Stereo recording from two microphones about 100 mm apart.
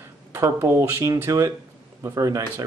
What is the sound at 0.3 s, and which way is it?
Speech, 25° right (ahead or behind).